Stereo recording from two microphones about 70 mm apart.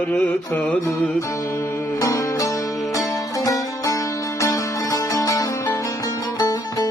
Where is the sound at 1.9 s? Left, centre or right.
Left.